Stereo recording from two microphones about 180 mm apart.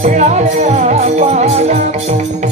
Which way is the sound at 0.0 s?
40° right (ahead or behind).